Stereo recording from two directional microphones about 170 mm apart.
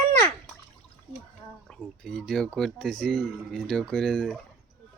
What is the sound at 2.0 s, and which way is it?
Speech, 5° left (ahead or behind).